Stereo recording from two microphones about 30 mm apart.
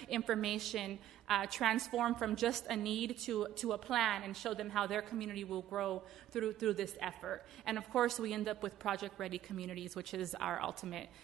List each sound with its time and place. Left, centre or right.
0.1 s a woman's voice: centre